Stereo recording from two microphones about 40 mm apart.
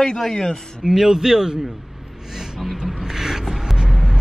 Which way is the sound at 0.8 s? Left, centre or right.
Centre.